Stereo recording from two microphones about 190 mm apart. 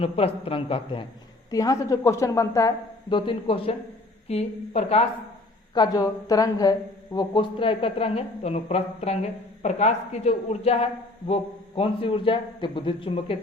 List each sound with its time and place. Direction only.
0.0 s a woman's voice: 30° left (ahead or behind)
5.7 s a woman's voice: 20° left (ahead or behind)